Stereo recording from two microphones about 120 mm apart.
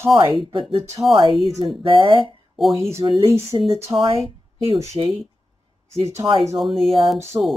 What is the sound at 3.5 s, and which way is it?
Speech, 50° right (ahead or behind).